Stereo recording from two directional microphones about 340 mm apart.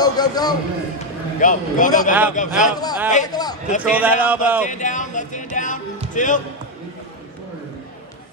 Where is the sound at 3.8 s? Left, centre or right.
Centre.